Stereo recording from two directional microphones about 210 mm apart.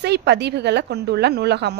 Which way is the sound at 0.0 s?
55° right (ahead or behind).